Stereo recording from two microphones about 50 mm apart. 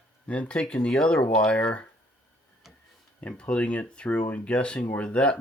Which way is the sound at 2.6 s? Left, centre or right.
Centre.